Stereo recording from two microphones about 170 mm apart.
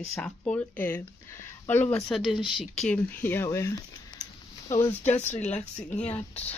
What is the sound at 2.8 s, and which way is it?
Speech, 10° left (ahead or behind).